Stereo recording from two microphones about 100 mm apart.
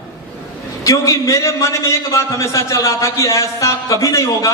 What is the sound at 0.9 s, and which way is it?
A man's voice, 35° left (ahead or behind).